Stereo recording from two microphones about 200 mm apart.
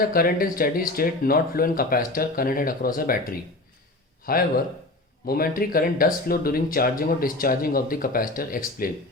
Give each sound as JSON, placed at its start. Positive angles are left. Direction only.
{"t": 0.0, "sound": "speech", "side_deg": 45}
{"t": 4.3, "sound": "speech", "side_deg": 45}